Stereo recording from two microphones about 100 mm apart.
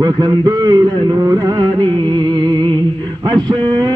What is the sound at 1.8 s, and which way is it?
Music, 50° right (ahead or behind).